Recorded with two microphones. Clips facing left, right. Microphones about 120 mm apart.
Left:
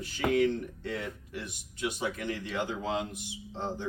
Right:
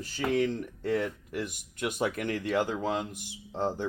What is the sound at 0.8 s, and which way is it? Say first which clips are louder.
Speech: right 7 dB; 50° right (ahead or behind).